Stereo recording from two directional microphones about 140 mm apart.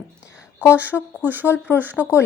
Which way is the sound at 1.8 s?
10° right (ahead or behind).